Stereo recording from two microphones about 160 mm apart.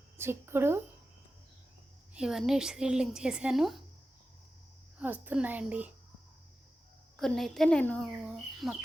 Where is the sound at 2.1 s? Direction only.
5° right (ahead or behind).